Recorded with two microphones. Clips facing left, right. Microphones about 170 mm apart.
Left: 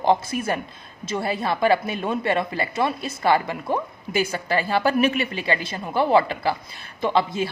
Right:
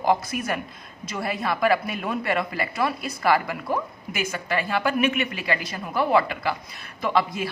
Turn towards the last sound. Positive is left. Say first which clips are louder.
# left 2 dB
turn(degrees=25)  # may be behind; listen again after turning